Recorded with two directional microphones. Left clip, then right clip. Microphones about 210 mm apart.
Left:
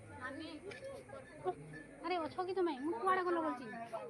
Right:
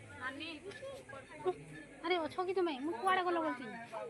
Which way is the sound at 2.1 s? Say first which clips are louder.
Right 3 dB; 45° right (ahead or behind).